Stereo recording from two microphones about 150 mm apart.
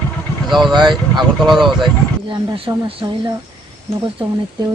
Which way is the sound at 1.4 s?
Centre (ahead or behind).